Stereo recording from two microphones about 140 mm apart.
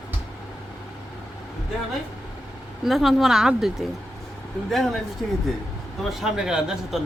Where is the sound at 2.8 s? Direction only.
Centre (ahead or behind).